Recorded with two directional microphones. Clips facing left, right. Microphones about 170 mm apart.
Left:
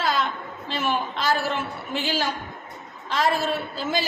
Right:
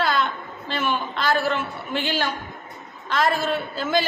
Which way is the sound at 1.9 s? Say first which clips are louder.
Right 1 dB; 5° left (ahead or behind).